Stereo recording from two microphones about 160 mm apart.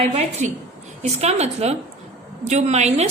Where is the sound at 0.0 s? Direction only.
40° right (ahead or behind).